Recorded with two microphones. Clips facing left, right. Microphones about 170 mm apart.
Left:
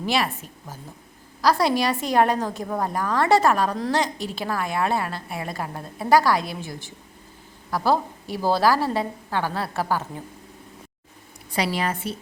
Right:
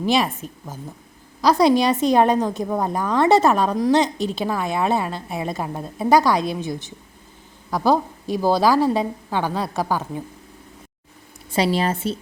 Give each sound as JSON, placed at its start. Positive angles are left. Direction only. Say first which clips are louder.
{"t": 0.1, "sound": "a woman's voice", "louder": "right 4 dB", "side_deg": -20}
{"t": 11.5, "sound": "a woman's voice", "louder": "right 5 dB", "side_deg": -25}